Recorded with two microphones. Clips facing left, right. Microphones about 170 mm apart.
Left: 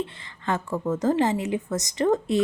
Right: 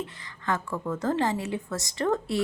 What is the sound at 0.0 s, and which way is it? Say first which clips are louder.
A woman's voice: left 3 dB; 25° left (ahead or behind).